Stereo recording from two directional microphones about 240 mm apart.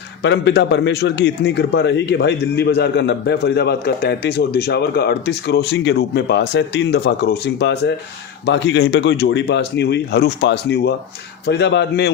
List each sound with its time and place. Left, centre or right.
0.2 s speech: left